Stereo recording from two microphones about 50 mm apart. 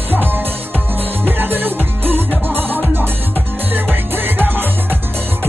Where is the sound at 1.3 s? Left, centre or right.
Right.